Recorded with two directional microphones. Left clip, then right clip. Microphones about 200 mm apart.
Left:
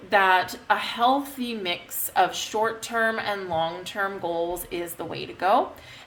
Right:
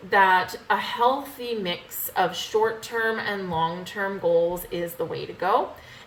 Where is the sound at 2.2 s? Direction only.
50° left (ahead or behind).